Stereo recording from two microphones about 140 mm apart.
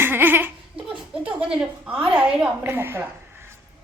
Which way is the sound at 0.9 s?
5° right (ahead or behind).